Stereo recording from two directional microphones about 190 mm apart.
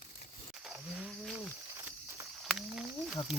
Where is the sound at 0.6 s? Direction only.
Centre (ahead or behind).